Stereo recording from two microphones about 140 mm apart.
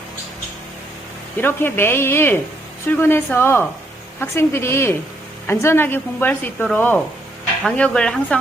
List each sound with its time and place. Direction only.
1.4 s speech: 15° left (ahead or behind)